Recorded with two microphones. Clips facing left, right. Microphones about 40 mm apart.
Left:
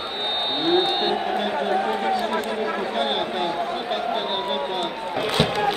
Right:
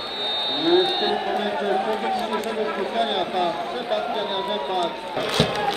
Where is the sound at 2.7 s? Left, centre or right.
Left.